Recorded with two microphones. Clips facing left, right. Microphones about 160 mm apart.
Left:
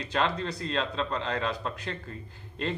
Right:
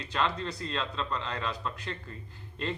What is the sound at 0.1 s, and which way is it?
Speech, 55° left (ahead or behind).